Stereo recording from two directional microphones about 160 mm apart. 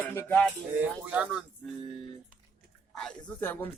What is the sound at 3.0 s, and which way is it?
Speech, 5° left (ahead or behind).